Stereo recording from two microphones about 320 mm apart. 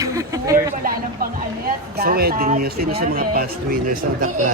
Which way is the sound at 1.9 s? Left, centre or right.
Right.